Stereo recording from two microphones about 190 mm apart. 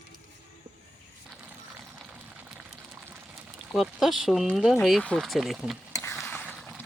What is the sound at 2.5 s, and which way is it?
Boiling, 5° right (ahead or behind).